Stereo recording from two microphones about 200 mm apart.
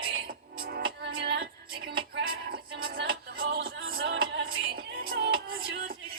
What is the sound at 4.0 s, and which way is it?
Music, 50° right (ahead or behind).